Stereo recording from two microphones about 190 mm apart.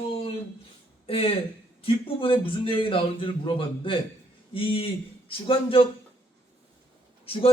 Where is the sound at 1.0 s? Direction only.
30° left (ahead or behind).